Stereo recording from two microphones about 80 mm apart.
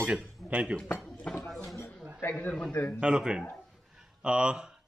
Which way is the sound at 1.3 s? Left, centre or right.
Centre.